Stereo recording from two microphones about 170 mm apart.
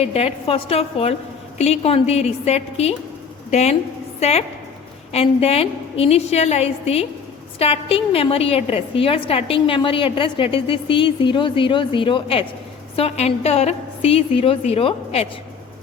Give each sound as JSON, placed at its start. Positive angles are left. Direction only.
{"t": 0.0, "sound": "a woman's voice", "side_deg": 35}